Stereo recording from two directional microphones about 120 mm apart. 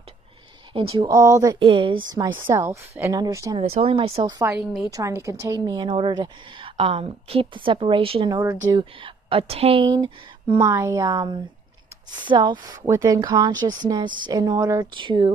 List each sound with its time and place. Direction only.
0.7 s a woman's voice: 45° right (ahead or behind)
1.0 s a woman's voice: 30° right (ahead or behind)
1.6 s a woman's voice: 45° right (ahead or behind)
2.6 s a woman's voice: 20° right (ahead or behind)
3.5 s a woman's voice: 55° right (ahead or behind)
4.5 s a woman's voice: 5° right (ahead or behind)
4.9 s a woman's voice: 25° right (ahead or behind)
5.7 s a woman's voice: 45° right (ahead or behind)
8.3 s speech: 30° right (ahead or behind)
8.7 s a woman's voice: 45° right (ahead or behind)
9.8 s speech: 35° right (ahead or behind)
12.7 s speech: 25° right (ahead or behind); by 15.3 s 40° right (ahead or behind)